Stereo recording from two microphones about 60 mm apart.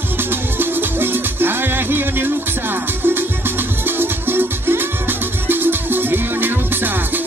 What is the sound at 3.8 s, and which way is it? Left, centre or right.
Music, right.